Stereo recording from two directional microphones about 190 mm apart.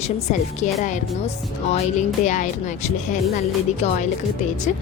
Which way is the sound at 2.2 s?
40° left (ahead or behind).